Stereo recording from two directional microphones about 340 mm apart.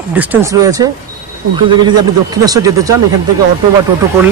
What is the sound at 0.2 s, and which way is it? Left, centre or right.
Speech, centre.